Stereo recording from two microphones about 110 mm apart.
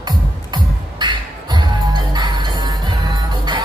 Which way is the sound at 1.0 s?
45° right (ahead or behind).